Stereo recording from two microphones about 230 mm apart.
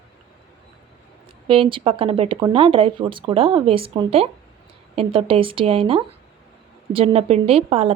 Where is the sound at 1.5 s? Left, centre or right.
Right.